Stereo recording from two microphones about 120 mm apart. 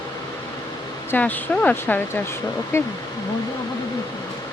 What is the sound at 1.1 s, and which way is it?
Speech, 15° left (ahead or behind).